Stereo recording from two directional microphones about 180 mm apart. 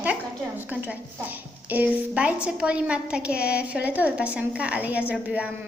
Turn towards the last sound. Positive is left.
turn(degrees=-10)  # may be behind; listen again after turning